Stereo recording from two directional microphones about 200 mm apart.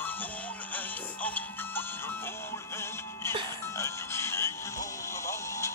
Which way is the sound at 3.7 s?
15° left (ahead or behind).